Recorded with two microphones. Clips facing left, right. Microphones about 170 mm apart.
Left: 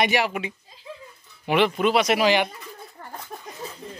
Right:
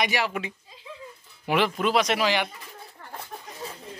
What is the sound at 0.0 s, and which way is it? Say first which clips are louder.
Speech: left 4 dB; 20° left (ahead or behind).